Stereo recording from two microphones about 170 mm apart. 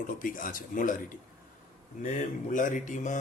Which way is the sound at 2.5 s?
50° left (ahead or behind).